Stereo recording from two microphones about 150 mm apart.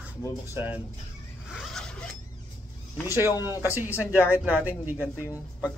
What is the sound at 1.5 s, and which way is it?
Zipper, centre (ahead or behind).